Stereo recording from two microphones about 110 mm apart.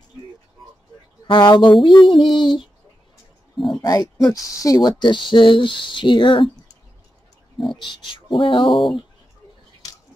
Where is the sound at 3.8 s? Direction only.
35° left (ahead or behind).